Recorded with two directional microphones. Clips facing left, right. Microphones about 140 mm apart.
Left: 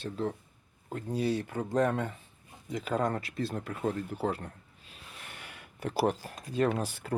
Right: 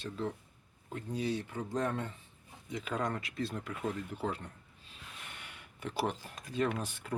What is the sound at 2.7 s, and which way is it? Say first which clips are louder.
Speech: left 5 dB; 35° left (ahead or behind).